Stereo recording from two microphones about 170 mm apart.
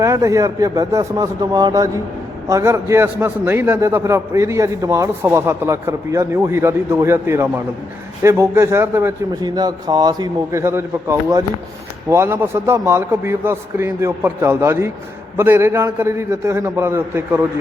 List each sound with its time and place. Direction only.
0.0 s a man's voice: 20° right (ahead or behind)